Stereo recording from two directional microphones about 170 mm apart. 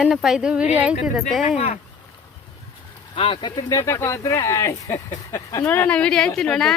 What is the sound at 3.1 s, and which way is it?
A woman's voice, 30° left (ahead or behind).